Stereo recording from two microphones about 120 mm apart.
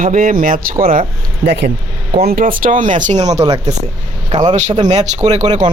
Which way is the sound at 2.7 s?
90° right.